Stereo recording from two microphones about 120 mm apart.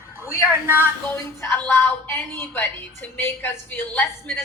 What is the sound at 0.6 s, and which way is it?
Speech, 15° right (ahead or behind).